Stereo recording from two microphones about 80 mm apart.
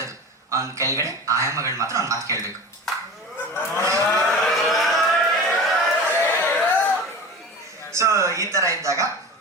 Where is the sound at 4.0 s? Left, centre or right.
Centre.